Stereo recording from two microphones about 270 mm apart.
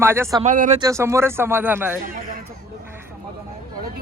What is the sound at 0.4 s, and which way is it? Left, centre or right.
Speech, right.